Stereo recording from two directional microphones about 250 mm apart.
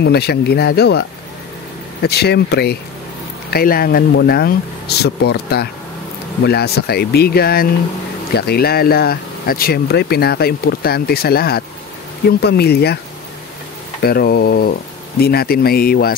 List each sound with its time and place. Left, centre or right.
0.0 s speech: left
14.0 s speech: left